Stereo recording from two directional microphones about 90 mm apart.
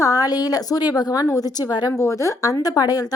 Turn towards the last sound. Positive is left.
turn(degrees=45)  # may be behind; listen again after turning